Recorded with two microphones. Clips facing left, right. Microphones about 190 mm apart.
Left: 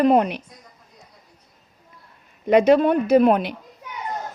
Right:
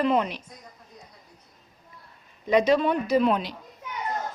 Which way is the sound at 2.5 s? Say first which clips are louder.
Left 6 dB; 55° left (ahead or behind).